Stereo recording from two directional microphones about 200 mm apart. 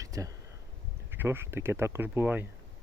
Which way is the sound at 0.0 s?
15° right (ahead or behind).